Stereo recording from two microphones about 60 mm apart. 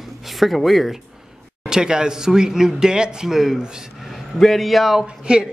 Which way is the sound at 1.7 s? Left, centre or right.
Centre.